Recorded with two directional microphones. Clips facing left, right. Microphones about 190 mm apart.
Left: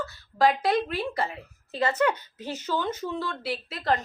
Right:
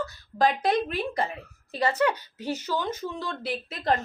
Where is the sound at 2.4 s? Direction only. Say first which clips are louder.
Even; 10° right (ahead or behind).